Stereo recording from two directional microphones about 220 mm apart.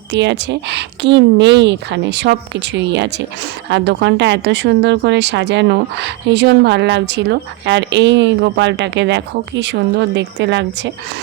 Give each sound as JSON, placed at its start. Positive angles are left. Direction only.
{"t": 0.1, "sound": "speech", "side_deg": -50}